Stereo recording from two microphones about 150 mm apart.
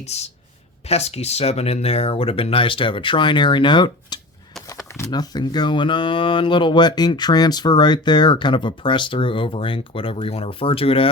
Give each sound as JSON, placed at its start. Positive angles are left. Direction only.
{"t": 0.0, "sound": "speech", "side_deg": 45}
{"t": 4.6, "sound": "a sound", "side_deg": 20}
{"t": 5.1, "sound": "speech", "side_deg": 25}